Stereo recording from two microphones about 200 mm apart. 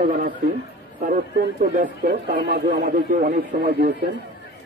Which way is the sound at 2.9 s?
40° right (ahead or behind).